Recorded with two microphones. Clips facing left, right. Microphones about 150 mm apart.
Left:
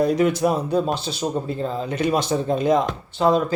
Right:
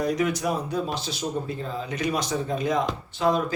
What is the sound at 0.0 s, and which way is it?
Speech, 30° left (ahead or behind).